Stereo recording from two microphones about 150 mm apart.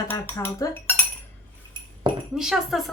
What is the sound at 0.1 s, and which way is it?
Speech, 20° left (ahead or behind).